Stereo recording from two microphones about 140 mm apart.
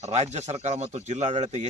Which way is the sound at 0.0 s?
50° right (ahead or behind).